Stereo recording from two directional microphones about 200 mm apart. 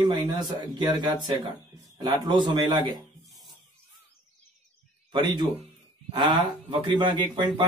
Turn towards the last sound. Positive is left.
turn(degrees=-25)  # may be behind; listen again after turning